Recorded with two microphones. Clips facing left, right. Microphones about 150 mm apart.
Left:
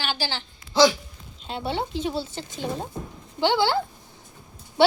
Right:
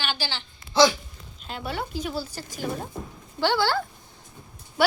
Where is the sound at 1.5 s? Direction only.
30° left (ahead or behind).